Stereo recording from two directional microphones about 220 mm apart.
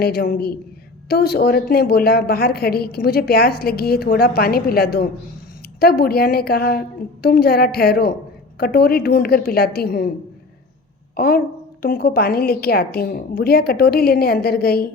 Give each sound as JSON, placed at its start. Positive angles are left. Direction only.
{"t": 0.0, "sound": "a woman's voice", "side_deg": 45}
{"t": 11.2, "sound": "a woman's voice", "side_deg": 45}